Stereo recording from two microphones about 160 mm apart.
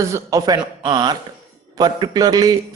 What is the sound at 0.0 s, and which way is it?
A man's voice, 20° right (ahead or behind).